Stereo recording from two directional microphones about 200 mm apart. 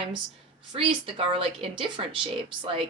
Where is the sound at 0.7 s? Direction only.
25° right (ahead or behind).